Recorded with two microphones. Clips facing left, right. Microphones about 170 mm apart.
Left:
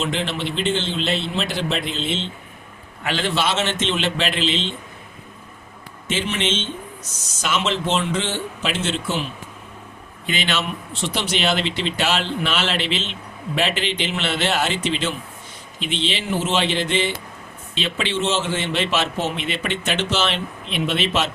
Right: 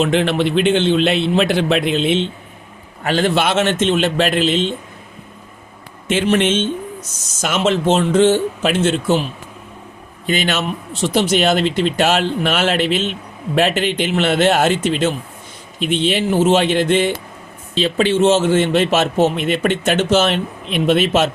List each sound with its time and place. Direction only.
0.0 s a man's voice: 60° right (ahead or behind)
3.0 s a man's voice: 45° right (ahead or behind)
6.2 s a man's voice: 50° right (ahead or behind)
10.2 s a man's voice: 45° right (ahead or behind)
17.7 s a man's voice: 40° right (ahead or behind)